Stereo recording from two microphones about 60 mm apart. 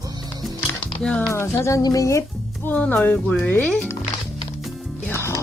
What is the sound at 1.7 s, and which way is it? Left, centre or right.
Speech, left.